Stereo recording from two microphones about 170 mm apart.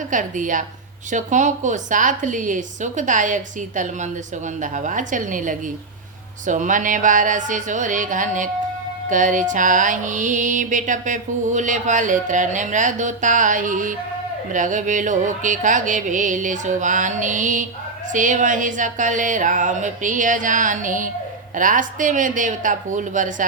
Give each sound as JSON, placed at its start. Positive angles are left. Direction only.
{"t": 0.1, "sound": "music", "side_deg": -50}